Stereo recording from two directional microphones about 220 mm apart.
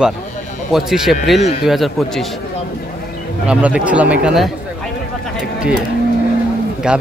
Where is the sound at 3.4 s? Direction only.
5° right (ahead or behind).